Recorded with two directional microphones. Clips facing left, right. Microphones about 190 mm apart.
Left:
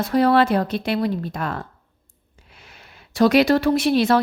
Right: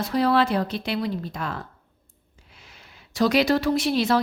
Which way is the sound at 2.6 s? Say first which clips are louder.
Left 3 dB; 60° left (ahead or behind).